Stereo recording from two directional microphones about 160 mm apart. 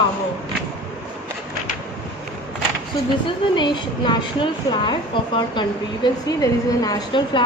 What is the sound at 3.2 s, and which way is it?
A woman's voice, 30° left (ahead or behind).